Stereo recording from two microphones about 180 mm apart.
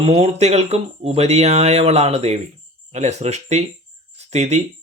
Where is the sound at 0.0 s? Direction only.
35° right (ahead or behind).